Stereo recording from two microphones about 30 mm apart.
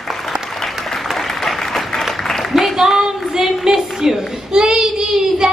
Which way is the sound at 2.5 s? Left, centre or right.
Centre.